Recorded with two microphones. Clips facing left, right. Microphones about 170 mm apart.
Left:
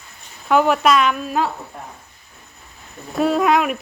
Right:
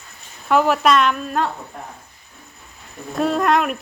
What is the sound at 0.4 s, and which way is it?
Speech, centre (ahead or behind).